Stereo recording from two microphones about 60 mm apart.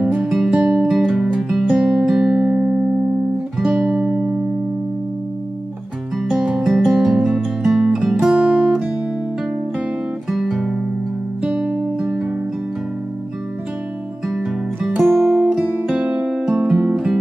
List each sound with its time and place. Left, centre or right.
0.2 s music: centre
3.5 s music: centre
3.8 s music: right
6.1 s music: centre
10.3 s guitar: centre
11.4 s music: centre
15.0 s music: centre
15.9 s music: centre